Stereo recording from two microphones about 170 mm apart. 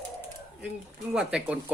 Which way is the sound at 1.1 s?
5° right (ahead or behind).